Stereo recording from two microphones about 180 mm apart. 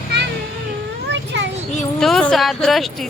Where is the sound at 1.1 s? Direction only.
80° right.